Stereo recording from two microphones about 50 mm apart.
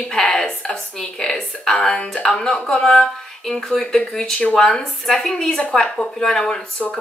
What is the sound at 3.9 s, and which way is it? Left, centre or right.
Speech, centre.